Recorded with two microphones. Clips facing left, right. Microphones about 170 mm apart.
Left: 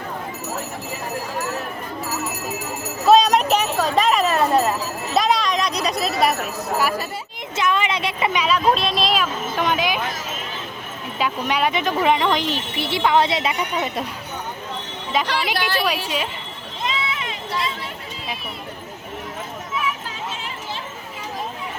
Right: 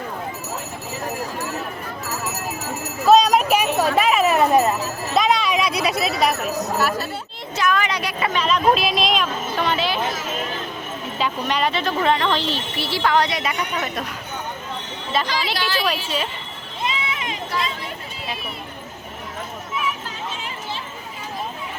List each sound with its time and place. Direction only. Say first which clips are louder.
3.1 s a sound: even; centre (ahead or behind)
4.4 s jingle bell: right 2 dB; 15° right (ahead or behind)
5.1 s a sound: even; centre (ahead or behind)
6.7 s speech: left 3 dB; 10° left (ahead or behind)
7.5 s a sound: even; 25° left (ahead or behind)
8.7 s speech: right 1 dB; 5° right (ahead or behind)
9.6 s speech: left 1 dB; 15° left (ahead or behind)
11.2 s speech: left 1 dB; 10° left (ahead or behind)
15.1 s speech: left 1 dB; 15° left (ahead or behind)
15.5 s a sound: left 1 dB; 55° left (ahead or behind)
16.0 s speech: even; 10° left (ahead or behind)
17.1 s run: even; 20° right (ahead or behind)